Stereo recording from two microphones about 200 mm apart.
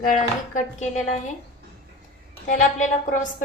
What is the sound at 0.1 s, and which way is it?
Speech, 40° left (ahead or behind).